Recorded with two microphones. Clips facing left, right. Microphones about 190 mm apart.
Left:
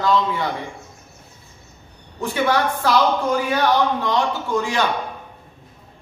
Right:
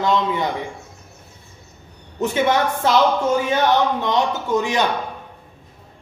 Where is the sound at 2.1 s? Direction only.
20° right (ahead or behind).